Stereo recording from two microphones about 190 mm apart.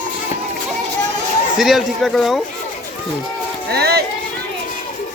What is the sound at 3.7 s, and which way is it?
Speech, 55° right (ahead or behind).